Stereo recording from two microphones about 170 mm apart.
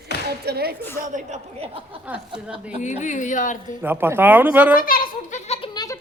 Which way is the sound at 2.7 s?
45° left (ahead or behind).